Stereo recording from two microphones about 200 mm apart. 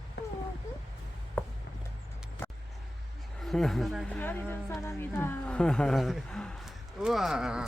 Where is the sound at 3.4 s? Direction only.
Centre (ahead or behind).